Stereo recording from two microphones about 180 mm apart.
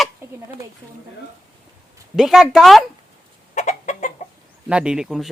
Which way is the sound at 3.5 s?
40° left (ahead or behind).